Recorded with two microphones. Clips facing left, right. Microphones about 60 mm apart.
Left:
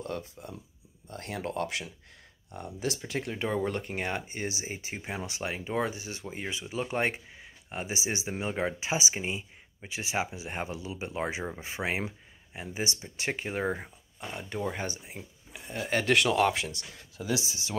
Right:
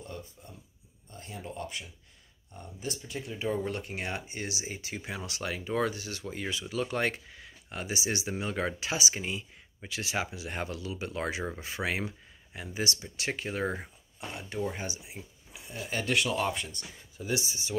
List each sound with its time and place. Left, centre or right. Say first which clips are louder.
0.0 s speech: left 7 dB; left
1.0 s speech: left 7 dB; left
3.7 s speech: left 3 dB; left